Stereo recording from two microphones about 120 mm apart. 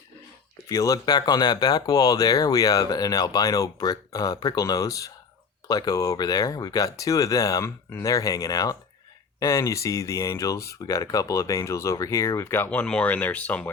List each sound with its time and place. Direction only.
0.7 s speech: 30° left (ahead or behind); by 13.7 s 10° left (ahead or behind)